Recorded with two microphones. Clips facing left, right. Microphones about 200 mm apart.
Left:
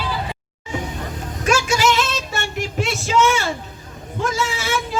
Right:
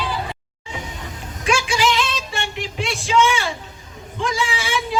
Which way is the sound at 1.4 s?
45° left (ahead or behind).